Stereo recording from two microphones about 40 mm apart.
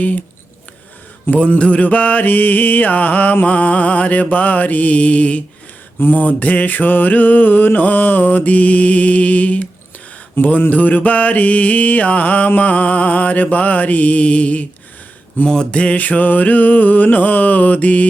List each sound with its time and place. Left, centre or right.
0.0 s mantra: left
1.5 s mantra: left
3.4 s mantra: left
6.0 s mantra: left
6.2 s mantra: left
10.4 s a sound: left
10.7 s mantra: left
16.0 s mantra: left